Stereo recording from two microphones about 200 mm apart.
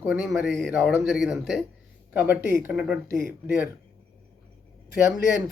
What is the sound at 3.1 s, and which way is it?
Speech, 50° left (ahead or behind).